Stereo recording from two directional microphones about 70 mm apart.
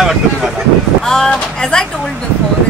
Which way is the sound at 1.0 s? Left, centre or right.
Centre.